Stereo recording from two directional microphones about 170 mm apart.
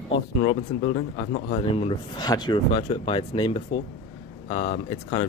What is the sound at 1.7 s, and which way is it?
Speech, 30° left (ahead or behind).